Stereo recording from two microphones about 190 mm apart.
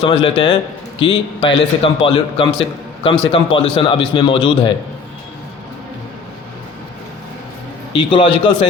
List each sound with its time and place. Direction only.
0.0 s a man's voice: 30° left (ahead or behind)
7.9 s a man's voice: 30° left (ahead or behind)